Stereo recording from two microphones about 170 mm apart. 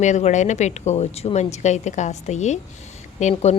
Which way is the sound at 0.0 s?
45° left (ahead or behind).